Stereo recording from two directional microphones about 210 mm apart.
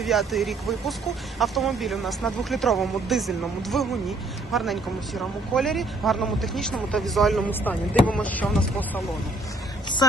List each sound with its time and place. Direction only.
0.0 s speech: centre (ahead or behind)
10.0 s speech: 20° left (ahead or behind)